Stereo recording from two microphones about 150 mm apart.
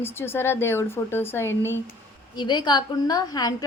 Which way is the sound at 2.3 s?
30° left (ahead or behind).